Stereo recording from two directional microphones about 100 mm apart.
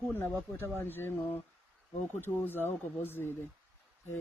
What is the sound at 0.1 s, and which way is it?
Speech, 20° left (ahead or behind).